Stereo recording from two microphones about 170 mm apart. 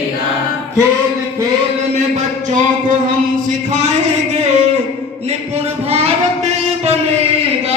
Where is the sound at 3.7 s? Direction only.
45° right (ahead or behind).